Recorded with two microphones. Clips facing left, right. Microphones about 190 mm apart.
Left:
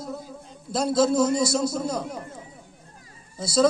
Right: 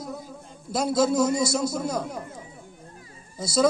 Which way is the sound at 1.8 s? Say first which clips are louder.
Even; 10° right (ahead or behind).